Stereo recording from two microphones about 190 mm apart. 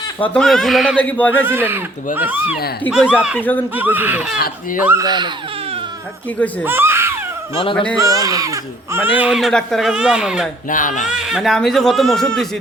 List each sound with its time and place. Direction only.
0.3 s speech: centre (ahead or behind)
1.5 s speech: 10° right (ahead or behind)
4.4 s speech: 50° left (ahead or behind)
4.8 s speech: 10° right (ahead or behind)
5.0 s speech: 25° right (ahead or behind)
6.7 s baby cry: 10° right (ahead or behind)
7.5 s speech: 25° left (ahead or behind)
7.9 s speech: 20° right (ahead or behind)
10.7 s speech: 45° left (ahead or behind)
11.1 s speech: 5° right (ahead or behind)